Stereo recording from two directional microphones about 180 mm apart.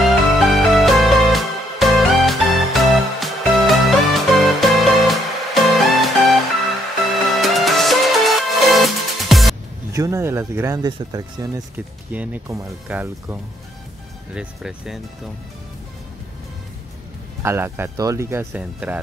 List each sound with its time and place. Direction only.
0.0 s music: centre (ahead or behind)
9.9 s speech: 15° right (ahead or behind)
11.7 s speech: 10° right (ahead or behind)
17.4 s speech: 15° right (ahead or behind)